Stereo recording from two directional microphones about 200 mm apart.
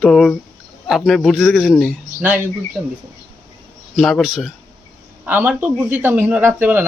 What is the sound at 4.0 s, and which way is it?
A man's voice, centre (ahead or behind).